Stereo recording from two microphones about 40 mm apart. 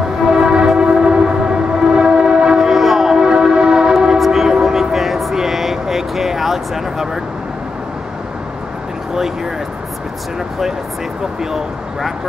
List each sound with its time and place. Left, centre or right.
0.4 s train: centre
2.7 s train: centre
4.3 s vehicle: centre